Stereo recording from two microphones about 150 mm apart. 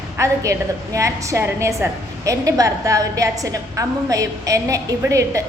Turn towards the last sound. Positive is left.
turn(degrees=-20)  # may be behind; listen again after turning